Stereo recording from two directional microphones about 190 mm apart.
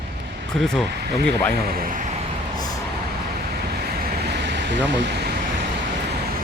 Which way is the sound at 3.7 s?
55° right (ahead or behind).